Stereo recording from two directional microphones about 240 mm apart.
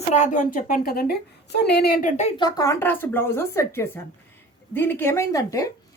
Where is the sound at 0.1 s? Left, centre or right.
Left.